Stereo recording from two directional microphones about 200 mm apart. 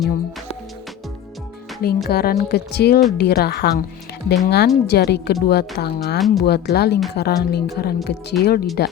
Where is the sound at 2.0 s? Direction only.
50° left (ahead or behind).